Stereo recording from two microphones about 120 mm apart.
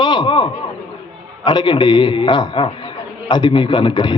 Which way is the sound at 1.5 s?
40° left (ahead or behind).